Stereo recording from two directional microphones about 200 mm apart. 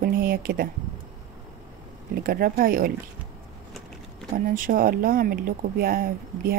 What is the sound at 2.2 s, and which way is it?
Speech, 45° right (ahead or behind).